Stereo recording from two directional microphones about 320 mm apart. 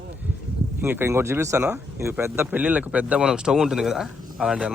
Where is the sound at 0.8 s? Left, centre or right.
Centre.